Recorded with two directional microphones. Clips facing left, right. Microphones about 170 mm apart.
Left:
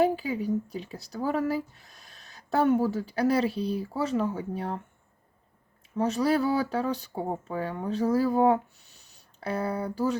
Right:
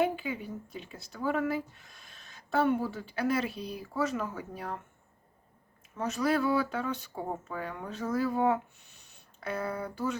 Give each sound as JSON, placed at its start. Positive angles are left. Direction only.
{"t": 0.0, "sound": "speech", "side_deg": 35}
{"t": 6.0, "sound": "speech", "side_deg": 30}